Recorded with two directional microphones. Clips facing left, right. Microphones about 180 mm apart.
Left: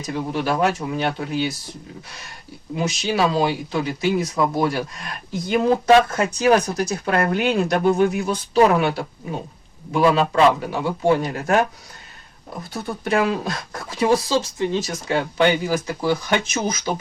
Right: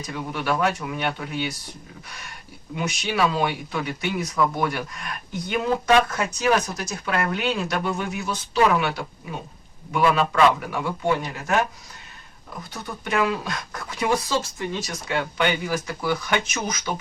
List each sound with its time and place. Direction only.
0.1 s speech: 35° left (ahead or behind)
2.7 s speech: 30° left (ahead or behind)
7.7 s speech: 35° left (ahead or behind)
12.7 s speech: 35° left (ahead or behind)